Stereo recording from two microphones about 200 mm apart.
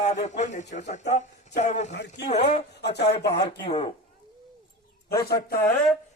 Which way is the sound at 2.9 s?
55° left (ahead or behind).